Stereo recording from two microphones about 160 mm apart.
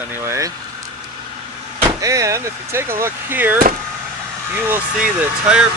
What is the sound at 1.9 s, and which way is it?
Speech, 20° right (ahead or behind).